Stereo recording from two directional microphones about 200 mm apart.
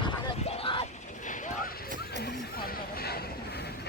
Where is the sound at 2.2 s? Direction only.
50° left (ahead or behind).